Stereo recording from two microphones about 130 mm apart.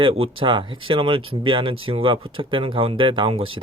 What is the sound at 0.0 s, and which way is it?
Speech, 45° right (ahead or behind).